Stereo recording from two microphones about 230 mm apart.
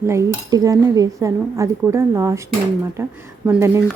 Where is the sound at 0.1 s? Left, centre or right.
Centre.